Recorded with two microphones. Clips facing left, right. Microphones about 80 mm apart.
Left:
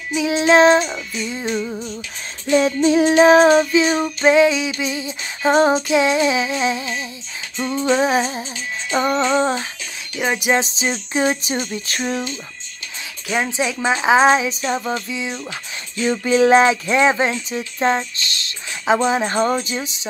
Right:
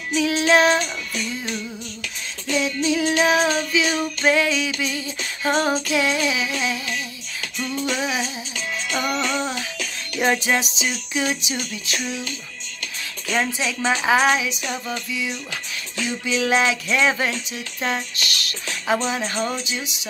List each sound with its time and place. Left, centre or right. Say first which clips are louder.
0.1 s female singing: left 3 dB; left
2.5 s child singing: left 7 dB; left
4.3 s female singing: left 6 dB; left
7.5 s child singing: left 7 dB; left
10.1 s music: right 1 dB; centre
10.4 s female singing: left 4 dB; left
10.8 s child singing: left 5 dB; left
13.3 s female singing: left 2 dB; centre
16.3 s child singing: left 7 dB; left
16.8 s female singing: left 5 dB; left
17.5 s speech: left 7 dB; left